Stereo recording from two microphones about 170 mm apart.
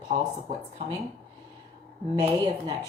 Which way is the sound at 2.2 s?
35° right (ahead or behind).